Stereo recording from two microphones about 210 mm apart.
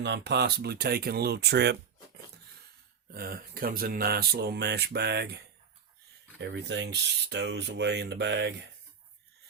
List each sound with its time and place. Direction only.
0.0 s speech: 55° right (ahead or behind)
3.1 s speech: 45° right (ahead or behind)
6.4 s speech: 55° right (ahead or behind)